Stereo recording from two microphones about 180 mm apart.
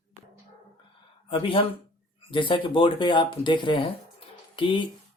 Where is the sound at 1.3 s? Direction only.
30° left (ahead or behind).